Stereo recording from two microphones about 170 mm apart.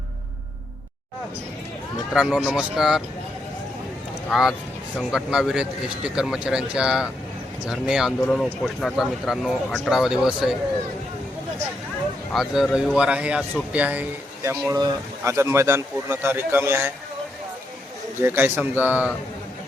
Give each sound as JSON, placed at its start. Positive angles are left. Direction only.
{"t": 2.1, "sound": "speech", "side_deg": -5}
{"t": 4.3, "sound": "speech", "side_deg": 0}
{"t": 12.3, "sound": "a man's voice", "side_deg": 0}
{"t": 14.7, "sound": "a man's voice", "side_deg": -20}
{"t": 18.2, "sound": "a man's voice", "side_deg": -15}